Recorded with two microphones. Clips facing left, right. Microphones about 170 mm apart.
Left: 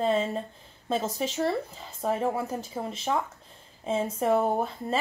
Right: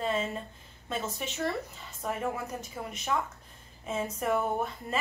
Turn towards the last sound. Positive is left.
turn(degrees=30)  # may be behind; listen again after turning